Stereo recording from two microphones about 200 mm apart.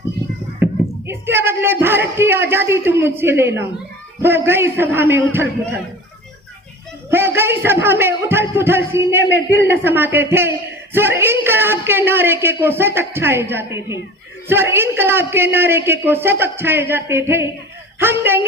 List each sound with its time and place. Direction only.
0.6 s a woman's voice: 10° right (ahead or behind)
7.1 s a woman's voice: 10° right (ahead or behind)